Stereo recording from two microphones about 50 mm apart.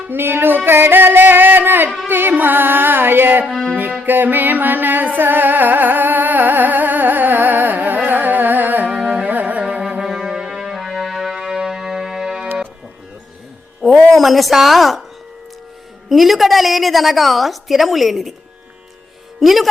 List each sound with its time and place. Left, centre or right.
0.1 s music: right
3.5 s music: centre
4.0 s music: right
9.6 s music: right
10.0 s music: centre
13.8 s a sound: centre
14.2 s a woman's voice: centre
16.0 s a woman's voice: centre
19.4 s speech: centre